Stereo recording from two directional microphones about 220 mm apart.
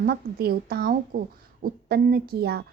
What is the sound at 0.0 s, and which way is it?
A woman's voice, 45° right (ahead or behind).